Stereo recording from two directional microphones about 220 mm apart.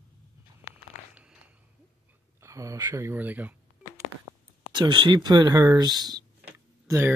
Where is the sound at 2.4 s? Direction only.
15° right (ahead or behind).